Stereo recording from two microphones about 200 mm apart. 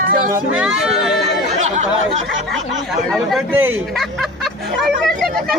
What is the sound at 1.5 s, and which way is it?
Chatter, 35° right (ahead or behind).